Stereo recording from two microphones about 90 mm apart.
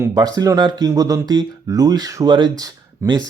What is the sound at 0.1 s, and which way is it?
Speech, 45° right (ahead or behind).